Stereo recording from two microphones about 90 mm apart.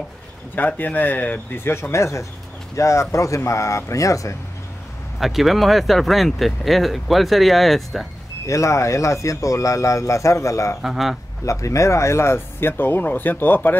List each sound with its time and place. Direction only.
0.6 s speech: 20° left (ahead or behind); by 4.4 s 35° left (ahead or behind)
5.2 s speech: centre (ahead or behind)
8.5 s speech: 35° left (ahead or behind)
10.8 s speech: 5° right (ahead or behind)
11.4 s speech: 35° left (ahead or behind); by 13.7 s 20° left (ahead or behind)